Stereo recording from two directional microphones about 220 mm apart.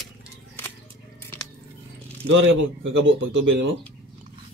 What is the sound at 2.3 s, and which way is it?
Speech, 55° right (ahead or behind).